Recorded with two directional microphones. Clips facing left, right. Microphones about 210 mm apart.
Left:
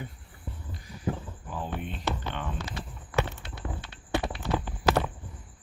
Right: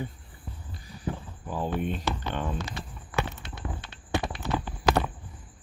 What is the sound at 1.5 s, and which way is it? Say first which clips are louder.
Speech: right 6 dB; 45° right (ahead or behind).